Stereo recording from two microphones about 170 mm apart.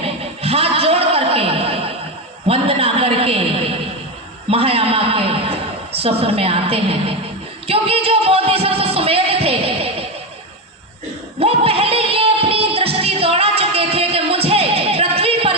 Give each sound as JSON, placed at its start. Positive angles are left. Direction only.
{"t": 0.0, "sound": "a sound", "side_deg": -35}
{"t": 4.4, "sound": "a man's voice", "side_deg": -35}
{"t": 7.7, "sound": "music", "side_deg": -35}
{"t": 11.3, "sound": "music", "side_deg": -35}